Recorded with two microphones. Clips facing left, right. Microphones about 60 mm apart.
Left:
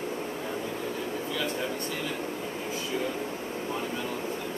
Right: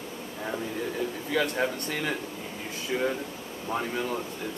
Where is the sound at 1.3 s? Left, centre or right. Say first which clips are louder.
Right 7 dB; right.